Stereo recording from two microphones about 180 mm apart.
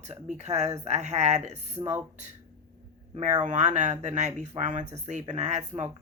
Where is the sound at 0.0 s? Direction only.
40° right (ahead or behind).